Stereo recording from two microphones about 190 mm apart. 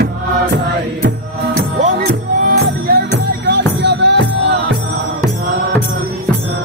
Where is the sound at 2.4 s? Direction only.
55° right (ahead or behind).